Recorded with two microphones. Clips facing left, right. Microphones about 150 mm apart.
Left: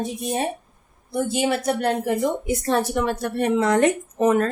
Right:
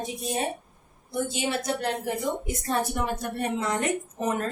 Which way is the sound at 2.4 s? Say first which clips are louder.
Left 6 dB; 90° left.